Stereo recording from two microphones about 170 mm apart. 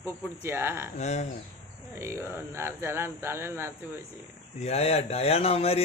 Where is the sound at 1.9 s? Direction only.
15° right (ahead or behind).